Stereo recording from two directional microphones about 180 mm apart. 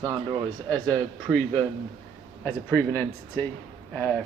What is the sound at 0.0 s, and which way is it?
Speech, 20° right (ahead or behind).